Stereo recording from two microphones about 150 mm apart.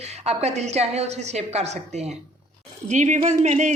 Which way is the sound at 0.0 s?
45° right (ahead or behind).